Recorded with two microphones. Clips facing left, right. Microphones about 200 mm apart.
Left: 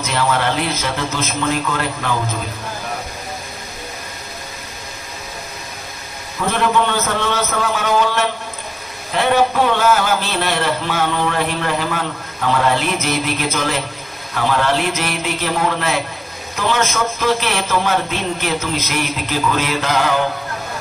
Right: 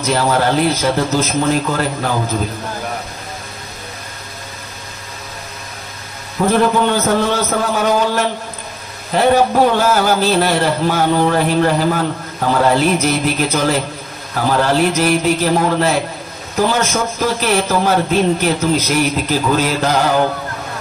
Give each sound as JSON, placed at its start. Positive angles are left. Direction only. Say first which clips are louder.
{"t": 0.0, "sound": "a man's voice", "louder": "right 4 dB", "side_deg": -40}
{"t": 6.5, "sound": "a man's voice", "louder": "right 3 dB", "side_deg": -40}